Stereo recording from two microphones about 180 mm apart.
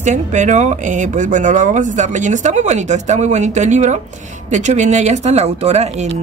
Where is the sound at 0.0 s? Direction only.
40° right (ahead or behind).